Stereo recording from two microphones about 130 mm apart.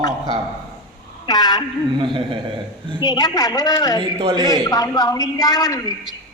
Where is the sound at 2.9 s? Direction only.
35° left (ahead or behind).